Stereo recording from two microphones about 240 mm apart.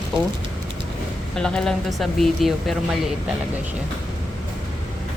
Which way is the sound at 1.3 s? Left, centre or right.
Centre.